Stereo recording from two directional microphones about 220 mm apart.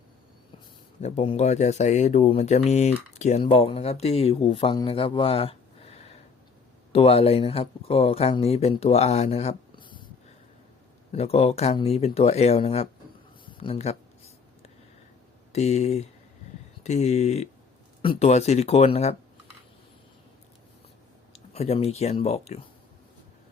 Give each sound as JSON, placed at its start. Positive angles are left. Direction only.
{"t": 1.0, "sound": "speech", "side_deg": 30}
{"t": 11.1, "sound": "speech", "side_deg": 30}
{"t": 13.4, "sound": "a sound", "side_deg": 25}
{"t": 15.5, "sound": "speech", "side_deg": 30}
{"t": 21.3, "sound": "speech", "side_deg": 30}